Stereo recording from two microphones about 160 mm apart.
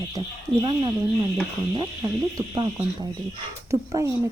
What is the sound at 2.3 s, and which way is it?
Speech, 25° right (ahead or behind).